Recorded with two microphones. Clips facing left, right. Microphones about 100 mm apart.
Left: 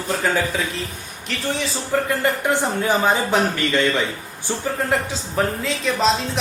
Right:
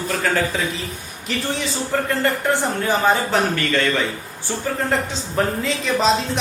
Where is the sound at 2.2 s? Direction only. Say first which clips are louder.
Even; 15° left (ahead or behind).